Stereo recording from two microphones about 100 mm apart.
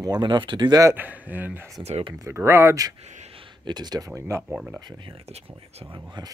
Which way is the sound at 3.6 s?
45° right (ahead or behind).